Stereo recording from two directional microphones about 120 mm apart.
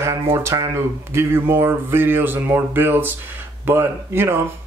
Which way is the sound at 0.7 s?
20° right (ahead or behind).